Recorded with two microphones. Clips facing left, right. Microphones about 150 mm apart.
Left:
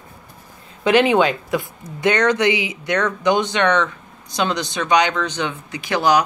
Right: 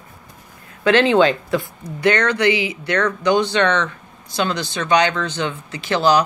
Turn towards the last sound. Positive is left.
turn(degrees=15)  # may be behind; listen again after turning